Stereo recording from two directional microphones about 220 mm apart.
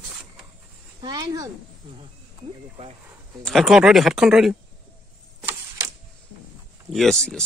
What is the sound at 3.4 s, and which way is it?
Speech, centre (ahead or behind).